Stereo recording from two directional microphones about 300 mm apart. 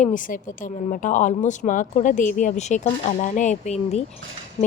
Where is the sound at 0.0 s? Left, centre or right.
Left.